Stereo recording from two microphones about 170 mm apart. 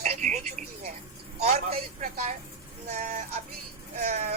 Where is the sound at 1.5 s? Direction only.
40° right (ahead or behind).